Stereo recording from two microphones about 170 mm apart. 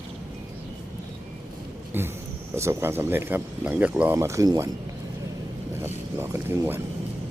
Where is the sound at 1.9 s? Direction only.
15° right (ahead or behind).